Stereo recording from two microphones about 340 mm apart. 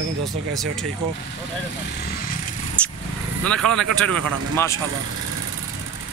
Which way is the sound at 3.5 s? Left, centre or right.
Centre.